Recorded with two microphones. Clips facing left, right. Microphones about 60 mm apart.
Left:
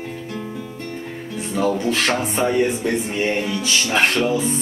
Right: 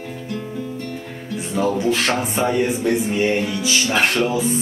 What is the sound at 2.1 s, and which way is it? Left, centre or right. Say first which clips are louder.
Music: left 1 dB; centre.